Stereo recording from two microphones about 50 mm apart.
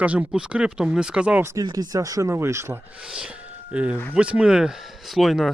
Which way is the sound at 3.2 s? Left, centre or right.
Right.